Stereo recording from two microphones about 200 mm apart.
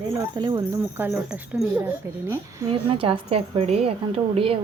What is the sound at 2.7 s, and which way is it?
A woman's voice, 25° right (ahead or behind).